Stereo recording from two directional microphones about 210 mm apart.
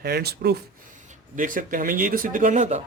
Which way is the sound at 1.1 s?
40° right (ahead or behind).